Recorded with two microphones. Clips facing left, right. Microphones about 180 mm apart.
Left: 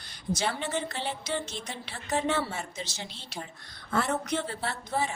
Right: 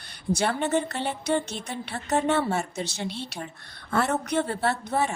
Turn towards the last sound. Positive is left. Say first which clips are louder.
# right 6 dB
turn(degrees=-60)  # may be behind; listen again after turning